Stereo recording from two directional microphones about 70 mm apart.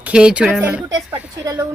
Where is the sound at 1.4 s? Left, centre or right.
Right.